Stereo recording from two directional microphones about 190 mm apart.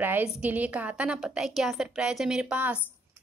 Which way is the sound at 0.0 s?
10° right (ahead or behind).